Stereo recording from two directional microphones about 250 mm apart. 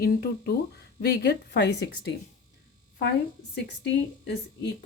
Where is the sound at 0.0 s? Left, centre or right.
Left.